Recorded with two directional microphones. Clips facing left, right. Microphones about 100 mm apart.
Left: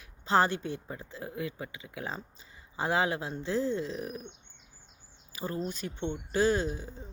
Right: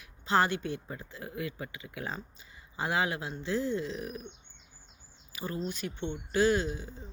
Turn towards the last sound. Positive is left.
turn(degrees=35)  # may be behind; listen again after turning